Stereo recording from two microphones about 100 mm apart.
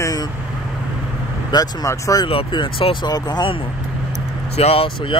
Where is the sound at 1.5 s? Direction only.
50° left (ahead or behind).